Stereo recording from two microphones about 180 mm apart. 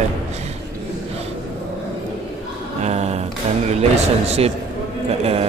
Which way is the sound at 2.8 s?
35° right (ahead or behind).